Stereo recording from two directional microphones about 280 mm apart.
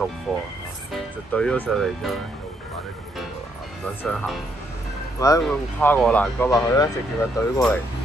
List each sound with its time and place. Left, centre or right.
0.9 s speech: centre
3.8 s speech: centre